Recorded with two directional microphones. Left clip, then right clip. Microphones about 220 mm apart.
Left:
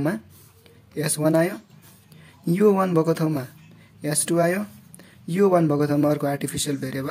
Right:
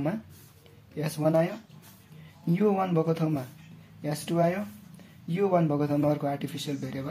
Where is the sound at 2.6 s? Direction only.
35° left (ahead or behind).